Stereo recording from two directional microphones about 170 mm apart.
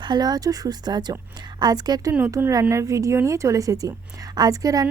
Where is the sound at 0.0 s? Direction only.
25° right (ahead or behind).